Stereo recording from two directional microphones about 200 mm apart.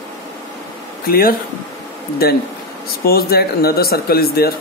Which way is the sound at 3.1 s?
50° left (ahead or behind).